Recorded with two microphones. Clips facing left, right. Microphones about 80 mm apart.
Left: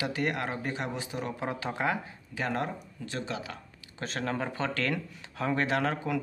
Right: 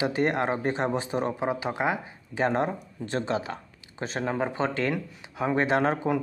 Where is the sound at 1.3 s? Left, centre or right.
Centre; by 3.6 s right.